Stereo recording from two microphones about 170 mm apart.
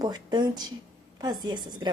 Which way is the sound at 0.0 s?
25° right (ahead or behind).